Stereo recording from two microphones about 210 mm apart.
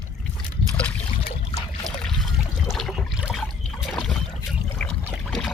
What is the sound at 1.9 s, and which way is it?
Boat, centre (ahead or behind).